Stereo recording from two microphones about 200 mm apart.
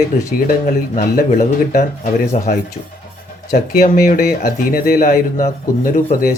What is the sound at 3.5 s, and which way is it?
Speech, 50° left (ahead or behind).